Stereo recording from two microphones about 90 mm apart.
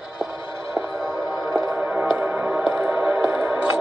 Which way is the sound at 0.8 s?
30° right (ahead or behind).